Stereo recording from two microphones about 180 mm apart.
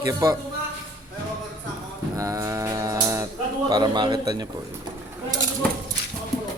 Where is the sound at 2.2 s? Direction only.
20° right (ahead or behind).